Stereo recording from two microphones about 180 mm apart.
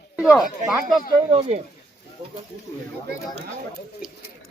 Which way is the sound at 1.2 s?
35° right (ahead or behind).